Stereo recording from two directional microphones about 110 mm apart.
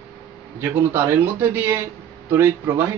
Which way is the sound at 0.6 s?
20° right (ahead or behind).